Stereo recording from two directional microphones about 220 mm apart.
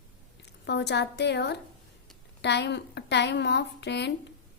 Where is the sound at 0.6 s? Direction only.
50° left (ahead or behind).